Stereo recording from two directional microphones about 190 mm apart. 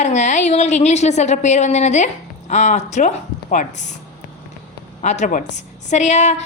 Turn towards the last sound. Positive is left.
turn(degrees=40)  # may be behind; listen again after turning